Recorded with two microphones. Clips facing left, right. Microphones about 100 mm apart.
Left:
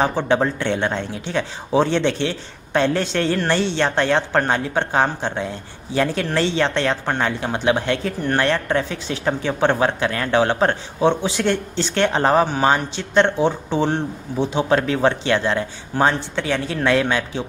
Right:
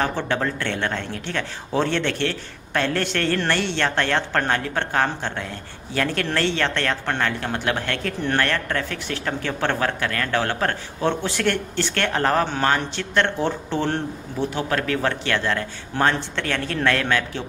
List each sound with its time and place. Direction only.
0.0 s a man's voice: 20° left (ahead or behind)
15.9 s a man's voice: 5° left (ahead or behind)